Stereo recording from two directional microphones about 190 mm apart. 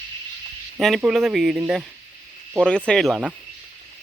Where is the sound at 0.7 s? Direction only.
Centre (ahead or behind).